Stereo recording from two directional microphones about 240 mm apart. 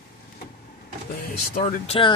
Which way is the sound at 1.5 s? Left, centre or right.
Left.